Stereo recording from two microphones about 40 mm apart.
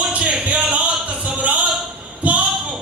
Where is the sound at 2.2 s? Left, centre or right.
Right.